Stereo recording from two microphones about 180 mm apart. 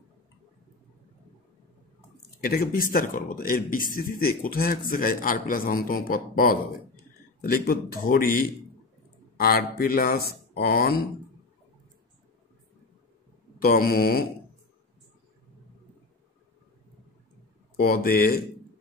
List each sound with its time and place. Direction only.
2.4 s a man's voice: 55° left (ahead or behind)
13.6 s speech: 55° left (ahead or behind)
17.7 s speech: 55° left (ahead or behind)